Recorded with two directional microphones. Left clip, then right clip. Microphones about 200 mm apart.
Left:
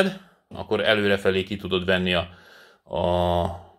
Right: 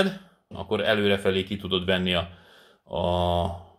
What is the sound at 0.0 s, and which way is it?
Speech, 25° left (ahead or behind).